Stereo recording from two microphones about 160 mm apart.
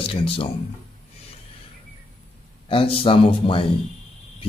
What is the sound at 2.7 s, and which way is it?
Speech, 35° left (ahead or behind).